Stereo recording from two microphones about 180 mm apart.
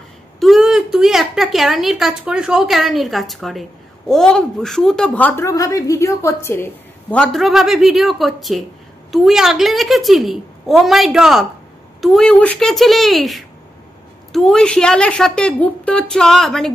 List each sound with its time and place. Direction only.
0.4 s a woman's voice: centre (ahead or behind)